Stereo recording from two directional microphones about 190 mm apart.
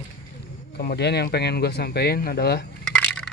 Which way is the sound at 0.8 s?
55° left (ahead or behind).